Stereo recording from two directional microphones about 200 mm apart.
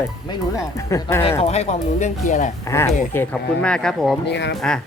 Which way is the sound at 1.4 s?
30° left (ahead or behind).